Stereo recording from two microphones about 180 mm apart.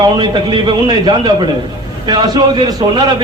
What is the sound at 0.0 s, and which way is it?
A man's voice, 25° right (ahead or behind).